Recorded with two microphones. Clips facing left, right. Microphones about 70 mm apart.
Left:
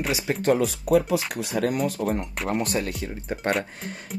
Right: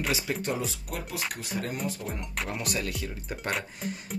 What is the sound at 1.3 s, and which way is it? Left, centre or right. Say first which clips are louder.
Speech: left 9 dB; left.